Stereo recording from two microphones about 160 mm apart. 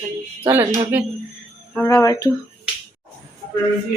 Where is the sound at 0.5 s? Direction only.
15° right (ahead or behind).